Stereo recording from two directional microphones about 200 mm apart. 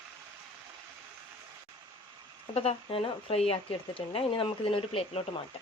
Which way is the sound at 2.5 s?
30° left (ahead or behind).